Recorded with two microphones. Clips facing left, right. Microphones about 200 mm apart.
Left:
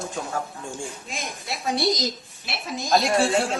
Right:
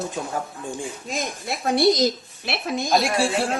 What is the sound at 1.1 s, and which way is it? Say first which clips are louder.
Speech: right 6 dB; 45° right (ahead or behind).